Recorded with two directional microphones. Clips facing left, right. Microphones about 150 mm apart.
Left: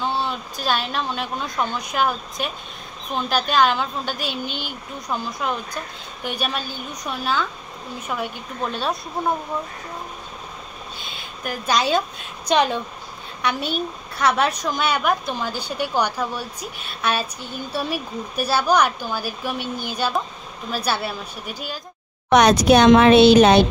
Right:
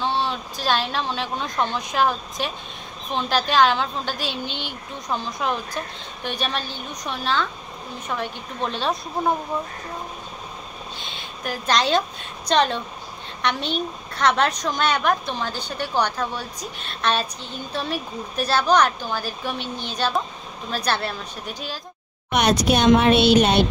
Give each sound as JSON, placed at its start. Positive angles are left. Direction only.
{"t": 0.0, "sound": "a woman's voice", "side_deg": 5}
{"t": 11.0, "sound": "a woman's voice", "side_deg": 5}
{"t": 22.3, "sound": "a woman's voice", "side_deg": 90}